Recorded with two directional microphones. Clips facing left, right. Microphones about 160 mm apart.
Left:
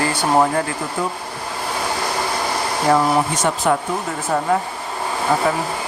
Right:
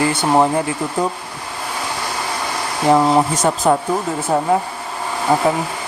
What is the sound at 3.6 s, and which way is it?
Speech, 30° right (ahead or behind).